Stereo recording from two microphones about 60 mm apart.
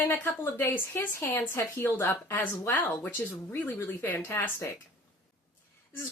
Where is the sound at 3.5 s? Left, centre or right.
Left.